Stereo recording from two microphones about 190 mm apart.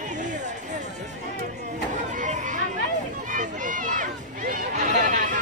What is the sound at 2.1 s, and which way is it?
Chatter, 40° right (ahead or behind).